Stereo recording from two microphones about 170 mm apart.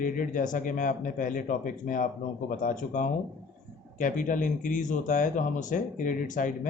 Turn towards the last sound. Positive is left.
turn(degrees=50)  # may be behind; listen again after turning